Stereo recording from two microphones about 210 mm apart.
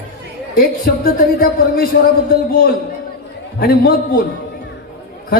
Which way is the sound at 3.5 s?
45° left (ahead or behind).